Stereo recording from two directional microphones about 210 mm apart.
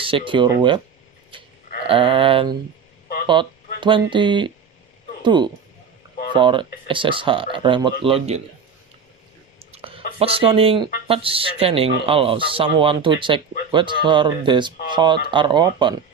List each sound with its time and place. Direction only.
0.0 s speech: 25° right (ahead or behind)
1.9 s speech: 25° right (ahead or behind)
3.8 s speech: 25° right (ahead or behind)
9.7 s a sound: 25° right (ahead or behind)
10.2 s speech: 25° right (ahead or behind)